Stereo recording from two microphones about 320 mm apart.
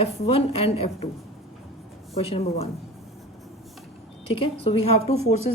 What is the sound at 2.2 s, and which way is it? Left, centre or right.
Speech, centre.